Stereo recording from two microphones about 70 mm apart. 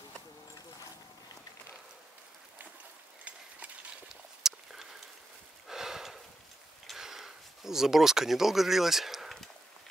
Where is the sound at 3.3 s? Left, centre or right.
Centre.